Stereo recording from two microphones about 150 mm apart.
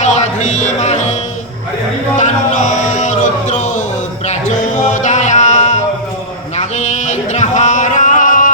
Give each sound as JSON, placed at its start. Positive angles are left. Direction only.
{"t": 0.0, "sound": "music", "side_deg": 50}
{"t": 2.1, "sound": "music", "side_deg": 55}
{"t": 6.6, "sound": "singing", "side_deg": 50}